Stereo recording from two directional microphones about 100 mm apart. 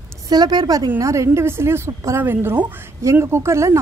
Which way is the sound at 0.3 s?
45° right (ahead or behind).